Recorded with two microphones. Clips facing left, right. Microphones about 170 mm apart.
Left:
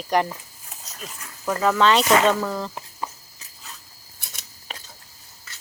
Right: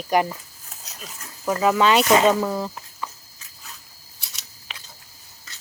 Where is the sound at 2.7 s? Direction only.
30° left (ahead or behind).